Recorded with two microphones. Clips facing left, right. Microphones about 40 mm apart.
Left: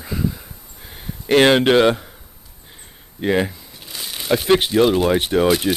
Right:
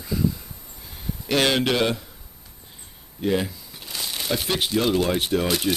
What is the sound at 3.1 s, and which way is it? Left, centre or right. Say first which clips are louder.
Speech: left 5 dB; left.